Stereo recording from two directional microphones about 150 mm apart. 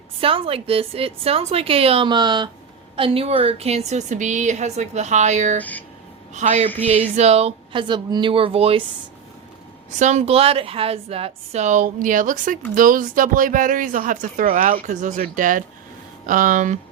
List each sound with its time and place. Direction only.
0.2 s a woman's voice: 40° right (ahead or behind)
5.5 s speech: 10° left (ahead or behind)
6.3 s a woman's voice: 50° right (ahead or behind)
10.0 s a woman's voice: 50° right (ahead or behind)